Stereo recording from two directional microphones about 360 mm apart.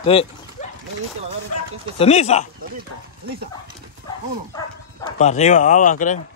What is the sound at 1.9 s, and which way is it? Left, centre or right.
Speech, centre.